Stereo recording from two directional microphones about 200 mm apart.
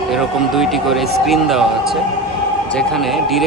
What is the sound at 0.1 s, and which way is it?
A man's voice, centre (ahead or behind).